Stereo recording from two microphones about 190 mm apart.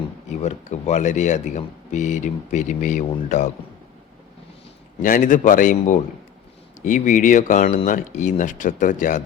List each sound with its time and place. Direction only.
0.3 s speech: 35° left (ahead or behind)
5.0 s speech: 45° left (ahead or behind)